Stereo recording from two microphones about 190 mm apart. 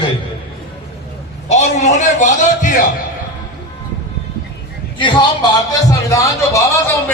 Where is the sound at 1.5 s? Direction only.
35° left (ahead or behind).